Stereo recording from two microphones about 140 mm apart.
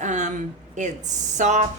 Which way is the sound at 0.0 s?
60° right (ahead or behind).